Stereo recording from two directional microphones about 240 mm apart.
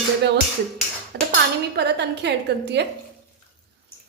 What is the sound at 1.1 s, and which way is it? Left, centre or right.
A woman's voice, right.